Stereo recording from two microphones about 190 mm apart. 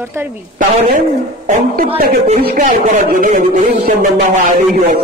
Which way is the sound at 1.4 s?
40° right (ahead or behind).